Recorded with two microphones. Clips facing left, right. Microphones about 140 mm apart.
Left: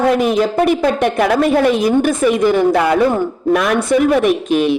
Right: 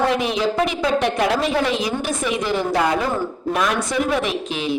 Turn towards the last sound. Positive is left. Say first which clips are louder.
# left 9 dB
turn(degrees=55)  # may be behind; listen again after turning